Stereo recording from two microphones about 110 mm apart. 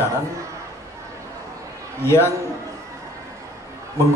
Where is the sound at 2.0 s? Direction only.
25° left (ahead or behind).